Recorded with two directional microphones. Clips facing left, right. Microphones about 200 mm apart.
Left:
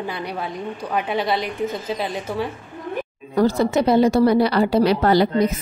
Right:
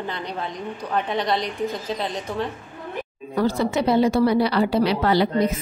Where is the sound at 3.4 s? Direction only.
45° left (ahead or behind).